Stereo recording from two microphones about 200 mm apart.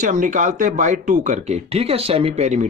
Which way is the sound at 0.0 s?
40° right (ahead or behind).